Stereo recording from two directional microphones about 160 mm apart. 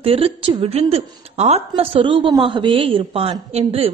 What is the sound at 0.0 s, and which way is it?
A woman's voice, 35° right (ahead or behind).